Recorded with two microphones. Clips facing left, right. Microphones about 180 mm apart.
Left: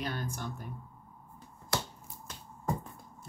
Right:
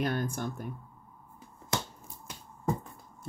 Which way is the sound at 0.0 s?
50° right (ahead or behind).